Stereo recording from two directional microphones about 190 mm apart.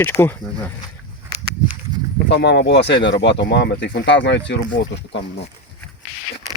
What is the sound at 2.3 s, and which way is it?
Speech, 65° left (ahead or behind).